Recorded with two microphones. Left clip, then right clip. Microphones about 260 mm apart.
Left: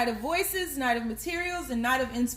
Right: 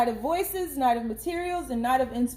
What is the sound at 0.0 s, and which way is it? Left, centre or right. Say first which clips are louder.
Speech: right 3 dB; left.